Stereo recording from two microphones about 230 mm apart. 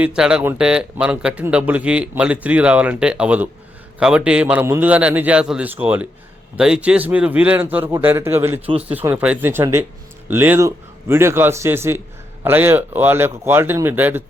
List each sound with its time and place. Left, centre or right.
0.0 s a man's voice: centre
8.6 s speech: right
8.9 s speech: centre